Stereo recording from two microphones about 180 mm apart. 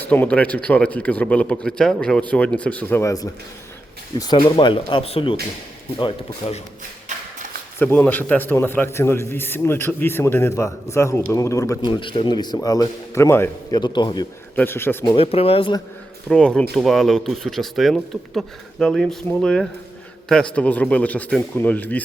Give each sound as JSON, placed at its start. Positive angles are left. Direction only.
{"t": 0.0, "sound": "a man's voice", "side_deg": 10}
{"t": 7.1, "sound": "a sound", "side_deg": -40}
{"t": 7.8, "sound": "a man's voice", "side_deg": 10}
{"t": 14.5, "sound": "a man's voice", "side_deg": 10}
{"t": 15.0, "sound": "speech", "side_deg": 30}
{"t": 16.3, "sound": "a man's voice", "side_deg": 5}